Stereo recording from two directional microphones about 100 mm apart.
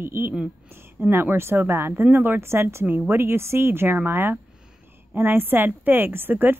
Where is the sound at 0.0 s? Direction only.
25° right (ahead or behind).